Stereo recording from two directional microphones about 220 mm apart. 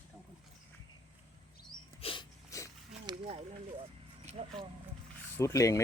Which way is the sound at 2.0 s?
25° left (ahead or behind).